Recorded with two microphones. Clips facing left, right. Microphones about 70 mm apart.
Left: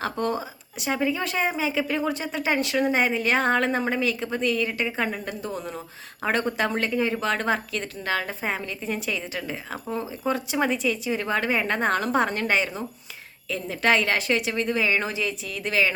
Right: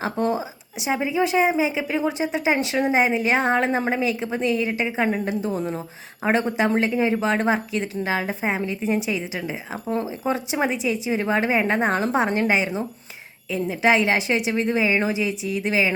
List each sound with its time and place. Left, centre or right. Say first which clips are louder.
0.0 s a woman's voice: right 3 dB; centre